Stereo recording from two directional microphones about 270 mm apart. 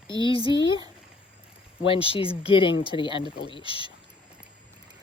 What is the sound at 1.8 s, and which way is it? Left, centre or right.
Speech, centre.